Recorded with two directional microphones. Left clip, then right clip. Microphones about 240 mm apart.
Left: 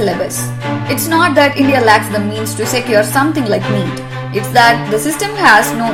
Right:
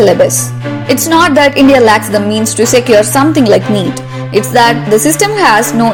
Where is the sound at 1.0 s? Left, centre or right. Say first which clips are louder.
Right 3 dB; right.